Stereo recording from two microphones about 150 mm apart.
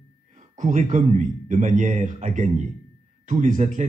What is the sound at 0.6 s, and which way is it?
Speech, 60° right (ahead or behind).